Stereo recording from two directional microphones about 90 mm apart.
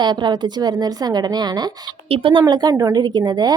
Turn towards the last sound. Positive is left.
turn(degrees=-55)  # may be behind; listen again after turning